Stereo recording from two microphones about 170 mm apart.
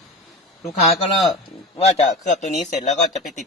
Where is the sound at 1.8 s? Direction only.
45° left (ahead or behind).